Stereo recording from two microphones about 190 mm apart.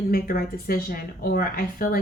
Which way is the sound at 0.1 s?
50° left (ahead or behind).